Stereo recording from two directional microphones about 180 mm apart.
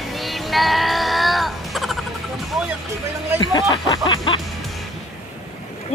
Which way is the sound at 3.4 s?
20° left (ahead or behind).